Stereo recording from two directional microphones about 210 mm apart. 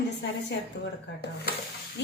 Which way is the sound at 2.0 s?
55° left (ahead or behind).